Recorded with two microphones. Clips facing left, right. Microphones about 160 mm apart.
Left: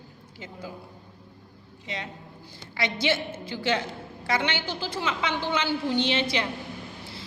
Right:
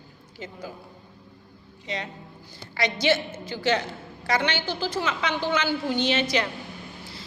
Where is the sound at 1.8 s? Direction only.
20° left (ahead or behind).